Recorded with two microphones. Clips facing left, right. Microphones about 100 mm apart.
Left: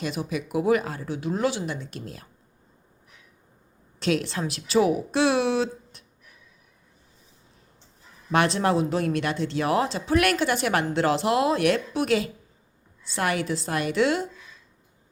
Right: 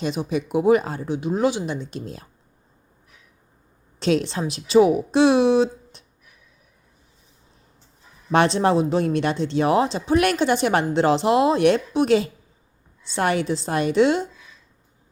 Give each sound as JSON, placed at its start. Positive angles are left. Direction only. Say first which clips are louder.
{"t": 0.0, "sound": "speech", "louder": "right 5 dB", "side_deg": -25}
{"t": 4.0, "sound": "speech", "louder": "right 4 dB", "side_deg": -25}
{"t": 8.3, "sound": "speech", "louder": "right 4 dB", "side_deg": -25}